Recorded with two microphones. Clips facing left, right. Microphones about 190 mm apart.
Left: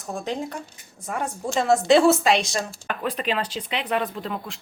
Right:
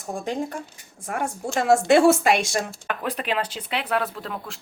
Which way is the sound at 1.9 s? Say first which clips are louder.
Left 1 dB; 50° right (ahead or behind).